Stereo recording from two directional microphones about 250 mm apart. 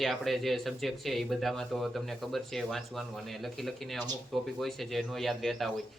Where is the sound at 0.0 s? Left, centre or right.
Centre.